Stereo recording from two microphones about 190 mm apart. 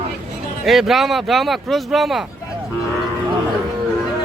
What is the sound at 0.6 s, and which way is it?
Speech, centre (ahead or behind).